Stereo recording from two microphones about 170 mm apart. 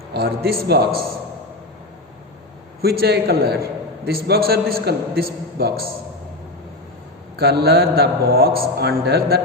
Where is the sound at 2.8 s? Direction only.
65° right (ahead or behind).